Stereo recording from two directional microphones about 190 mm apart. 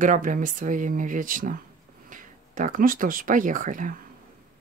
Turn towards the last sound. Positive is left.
turn(degrees=-45)  # may be behind; listen again after turning